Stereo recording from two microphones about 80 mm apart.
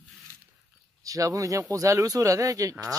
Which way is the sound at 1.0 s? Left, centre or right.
Right.